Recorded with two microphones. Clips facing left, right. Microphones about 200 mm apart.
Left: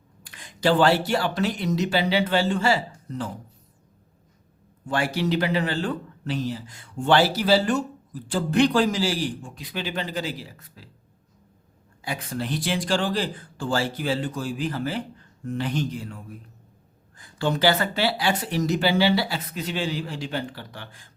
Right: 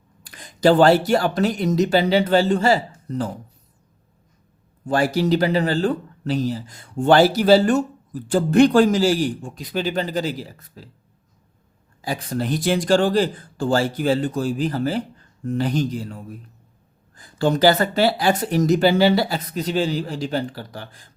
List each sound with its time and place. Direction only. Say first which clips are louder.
0.3 s speech: right 6 dB; 40° right (ahead or behind)
4.9 s speech: right 6 dB; 40° right (ahead or behind)
12.0 s speech: right 5 dB; 35° right (ahead or behind)